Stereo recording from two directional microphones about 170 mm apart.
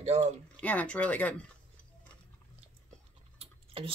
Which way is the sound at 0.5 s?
10° left (ahead or behind).